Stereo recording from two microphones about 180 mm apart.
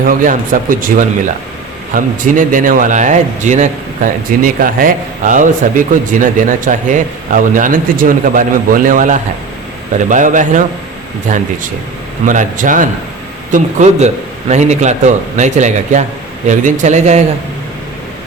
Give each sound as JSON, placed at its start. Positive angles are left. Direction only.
{"t": 0.0, "sound": "a man's voice", "side_deg": -50}